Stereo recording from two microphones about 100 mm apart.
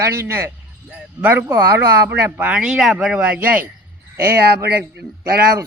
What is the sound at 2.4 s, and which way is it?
Speech, 10° right (ahead or behind).